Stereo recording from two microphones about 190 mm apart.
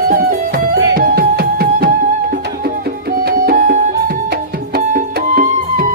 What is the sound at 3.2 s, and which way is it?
Music, 50° right (ahead or behind).